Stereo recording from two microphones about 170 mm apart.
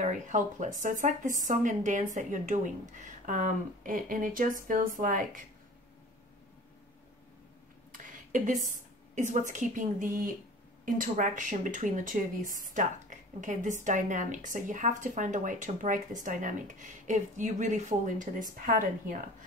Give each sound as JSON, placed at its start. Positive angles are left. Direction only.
{"t": 0.0, "sound": "speech", "side_deg": -45}
{"t": 8.0, "sound": "a woman's voice", "side_deg": -50}